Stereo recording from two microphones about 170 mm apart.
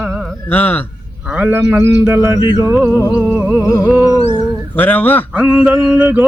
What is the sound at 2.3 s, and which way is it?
Speech, 25° left (ahead or behind).